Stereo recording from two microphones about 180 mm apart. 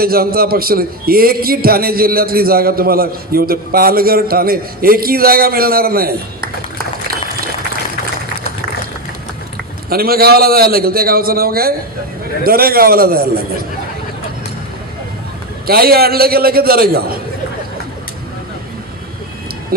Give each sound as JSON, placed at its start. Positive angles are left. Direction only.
{"t": 0.0, "sound": "a man's voice", "side_deg": -55}
{"t": 9.9, "sound": "a man's voice", "side_deg": -55}
{"t": 15.6, "sound": "a man's voice", "side_deg": -60}